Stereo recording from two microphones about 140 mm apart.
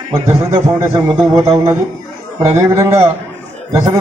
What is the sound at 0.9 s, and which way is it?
Speech, 25° right (ahead or behind).